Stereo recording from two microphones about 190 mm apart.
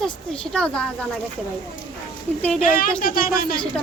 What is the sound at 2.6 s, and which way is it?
Speech, 45° left (ahead or behind).